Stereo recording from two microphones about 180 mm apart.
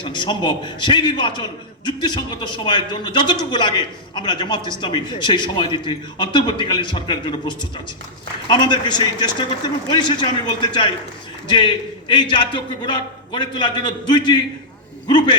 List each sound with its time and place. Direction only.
0.0 s a man's voice: 25° left (ahead or behind)